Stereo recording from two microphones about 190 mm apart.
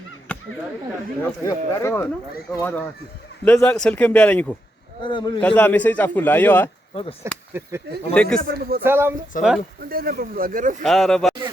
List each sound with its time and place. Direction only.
1.2 s a man's voice: 15° left (ahead or behind)
5.0 s a man's voice: 25° left (ahead or behind)
5.4 s a man's voice: 5° left (ahead or behind)
6.9 s a man's voice: 30° left (ahead or behind)
7.5 s speech: 10° right (ahead or behind)
8.1 s a man's voice: 5° left (ahead or behind)
8.4 s speech: 50° right (ahead or behind)
8.8 s speech: 10° right (ahead or behind)
9.3 s speech: 45° left (ahead or behind)
9.9 s speech: 50° right (ahead or behind)
10.8 s speech: centre (ahead or behind)